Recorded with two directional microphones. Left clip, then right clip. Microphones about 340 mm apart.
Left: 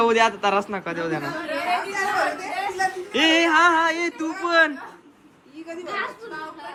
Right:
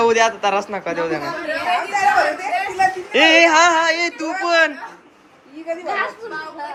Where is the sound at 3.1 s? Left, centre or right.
Centre.